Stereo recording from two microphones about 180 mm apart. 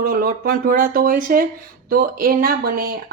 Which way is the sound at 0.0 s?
55° right (ahead or behind).